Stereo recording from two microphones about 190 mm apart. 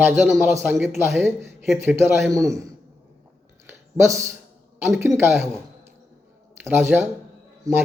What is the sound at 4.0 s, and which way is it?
A man's voice, 15° right (ahead or behind).